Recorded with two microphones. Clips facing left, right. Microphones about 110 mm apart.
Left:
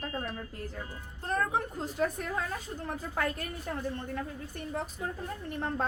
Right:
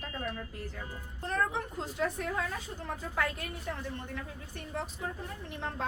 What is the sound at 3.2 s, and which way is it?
Speech, 40° left (ahead or behind).